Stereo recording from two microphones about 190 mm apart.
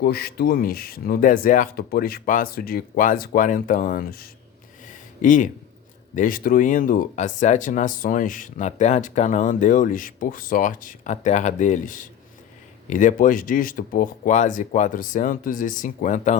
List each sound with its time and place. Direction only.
0.0 s speech: 55° left (ahead or behind)